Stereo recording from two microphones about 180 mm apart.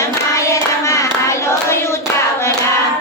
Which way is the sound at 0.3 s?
15° left (ahead or behind).